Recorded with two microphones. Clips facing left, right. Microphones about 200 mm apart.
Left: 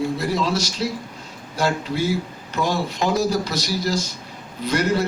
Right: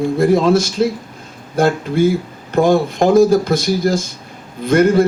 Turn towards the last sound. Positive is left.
turn(degrees=-50)  # may be behind; listen again after turning